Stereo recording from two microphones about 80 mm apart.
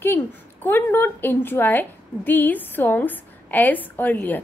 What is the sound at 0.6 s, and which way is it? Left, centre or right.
A woman's voice, left.